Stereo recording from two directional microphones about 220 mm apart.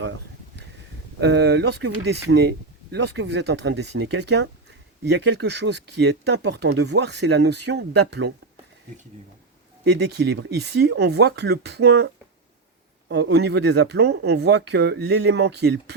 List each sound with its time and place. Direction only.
1.2 s speech: 50° right (ahead or behind)
9.8 s speech: 50° right (ahead or behind)